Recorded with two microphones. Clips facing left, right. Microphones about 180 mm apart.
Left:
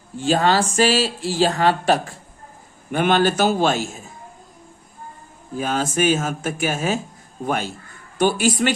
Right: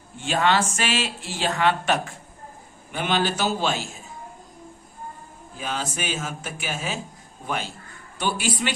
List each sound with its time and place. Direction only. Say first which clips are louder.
0.2 s speech: left 4 dB; 35° left (ahead or behind)
2.9 s speech: left 7 dB; 50° left (ahead or behind)
5.5 s speech: left 9 dB; 45° left (ahead or behind)